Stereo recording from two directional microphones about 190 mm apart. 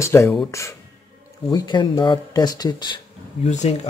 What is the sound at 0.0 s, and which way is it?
Speech, 15° left (ahead or behind).